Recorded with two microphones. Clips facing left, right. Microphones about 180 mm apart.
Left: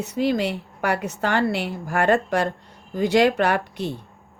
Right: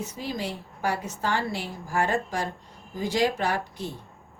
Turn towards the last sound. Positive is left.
turn(degrees=70)  # may be behind; listen again after turning